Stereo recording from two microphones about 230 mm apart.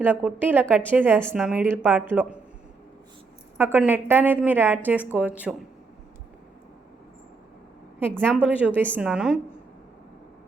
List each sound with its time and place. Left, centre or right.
0.0 s a woman's voice: centre
3.6 s a woman's voice: centre
8.1 s a woman's voice: centre